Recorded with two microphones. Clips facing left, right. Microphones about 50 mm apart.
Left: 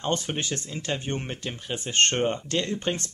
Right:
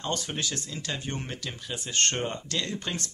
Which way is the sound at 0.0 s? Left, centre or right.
Left.